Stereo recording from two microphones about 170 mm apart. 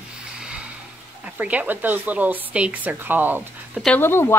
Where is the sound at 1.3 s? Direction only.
10° right (ahead or behind).